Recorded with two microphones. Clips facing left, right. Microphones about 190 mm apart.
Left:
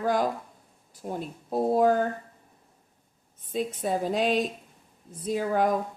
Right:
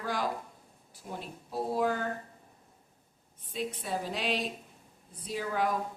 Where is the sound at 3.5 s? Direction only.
45° left (ahead or behind).